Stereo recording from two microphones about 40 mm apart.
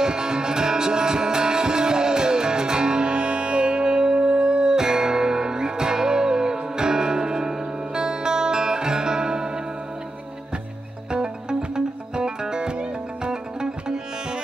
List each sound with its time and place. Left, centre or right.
0.0 s music: centre
11.1 s music: centre